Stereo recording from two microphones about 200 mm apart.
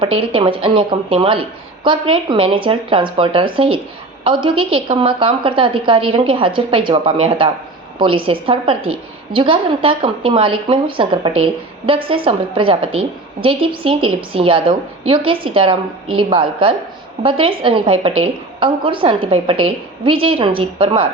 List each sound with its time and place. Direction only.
0.3 s a woman's voice: 25° right (ahead or behind)